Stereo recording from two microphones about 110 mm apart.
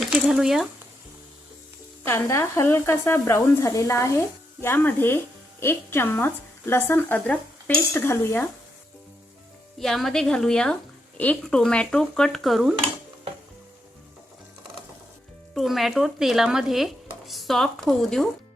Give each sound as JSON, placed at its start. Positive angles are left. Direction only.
{"t": 0.1, "sound": "speech", "side_deg": -5}
{"t": 2.0, "sound": "speech", "side_deg": 25}
{"t": 9.7, "sound": "speech", "side_deg": 0}
{"t": 15.5, "sound": "speech", "side_deg": 0}